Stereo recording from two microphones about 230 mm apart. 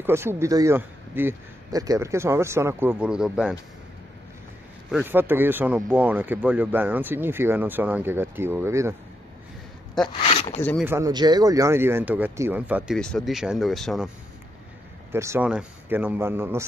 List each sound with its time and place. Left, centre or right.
0.0 s speech: centre
4.9 s speech: centre
10.0 s speech: left
10.8 s speech: centre
15.1 s speech: centre